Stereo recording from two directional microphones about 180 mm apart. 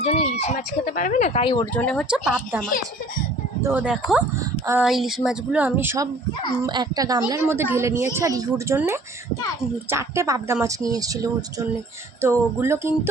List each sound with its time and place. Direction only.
0.0 s speech: 35° left (ahead or behind)
1.7 s speech: 5° left (ahead or behind); by 4.9 s 10° right (ahead or behind)
4.9 s speech: centre (ahead or behind)